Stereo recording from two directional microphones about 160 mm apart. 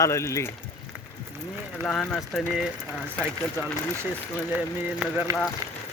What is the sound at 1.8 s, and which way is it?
Speech, 5° left (ahead or behind).